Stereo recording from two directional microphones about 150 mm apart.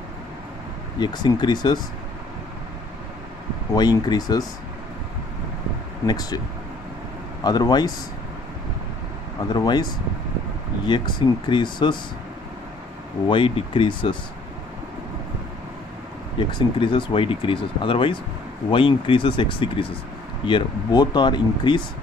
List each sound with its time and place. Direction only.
0.9 s speech: 30° left (ahead or behind)
3.7 s speech: 25° left (ahead or behind)
6.0 s speech: 25° left (ahead or behind)
7.4 s speech: 25° left (ahead or behind)
9.5 s speech: 30° left (ahead or behind)
13.3 s speech: 35° left (ahead or behind)
16.3 s speech: 35° left (ahead or behind)